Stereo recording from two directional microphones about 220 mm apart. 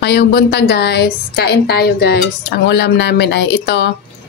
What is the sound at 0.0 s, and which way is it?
A woman's voice, 50° left (ahead or behind).